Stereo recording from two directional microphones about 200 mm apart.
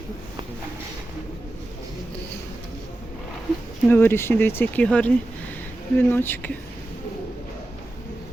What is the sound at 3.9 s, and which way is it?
Speech, 10° left (ahead or behind).